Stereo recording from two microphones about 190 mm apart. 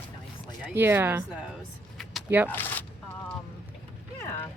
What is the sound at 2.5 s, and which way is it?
Speech, 10° left (ahead or behind).